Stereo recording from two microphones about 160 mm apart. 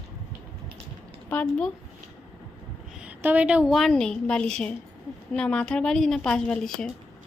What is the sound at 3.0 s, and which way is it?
Speech, 10° right (ahead or behind).